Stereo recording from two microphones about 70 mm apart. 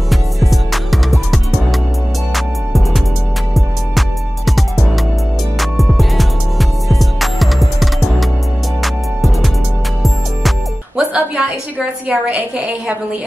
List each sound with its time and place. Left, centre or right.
0.1 s music: centre
4.5 s music: centre
11.0 s a sound: centre